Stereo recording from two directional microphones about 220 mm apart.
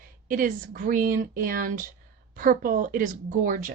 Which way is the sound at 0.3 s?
40° right (ahead or behind).